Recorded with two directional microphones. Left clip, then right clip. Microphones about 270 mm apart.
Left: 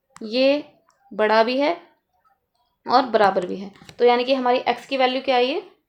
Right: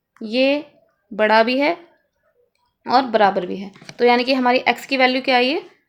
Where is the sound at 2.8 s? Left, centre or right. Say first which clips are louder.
Right 2 dB; centre.